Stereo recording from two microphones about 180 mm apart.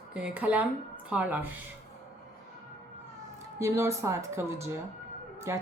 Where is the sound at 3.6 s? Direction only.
15° right (ahead or behind).